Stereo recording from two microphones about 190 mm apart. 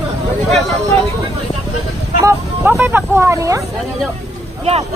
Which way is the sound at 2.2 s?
10° right (ahead or behind).